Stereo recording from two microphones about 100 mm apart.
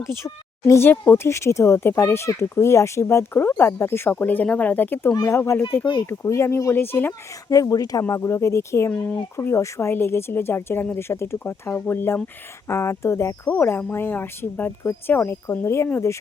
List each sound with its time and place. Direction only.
0.7 s speech: 20° left (ahead or behind)
7.4 s speech: 35° left (ahead or behind)
8.9 s speech: 15° left (ahead or behind)
9.3 s speech: 25° left (ahead or behind)